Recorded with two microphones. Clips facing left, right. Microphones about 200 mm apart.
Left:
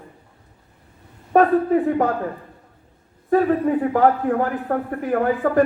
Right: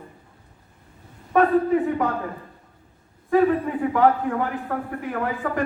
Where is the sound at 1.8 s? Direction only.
40° left (ahead or behind).